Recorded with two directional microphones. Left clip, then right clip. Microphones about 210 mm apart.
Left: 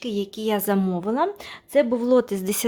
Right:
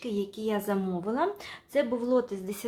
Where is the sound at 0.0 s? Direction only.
45° left (ahead or behind).